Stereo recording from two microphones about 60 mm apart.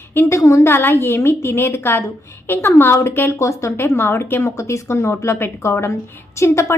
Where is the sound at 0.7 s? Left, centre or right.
Left.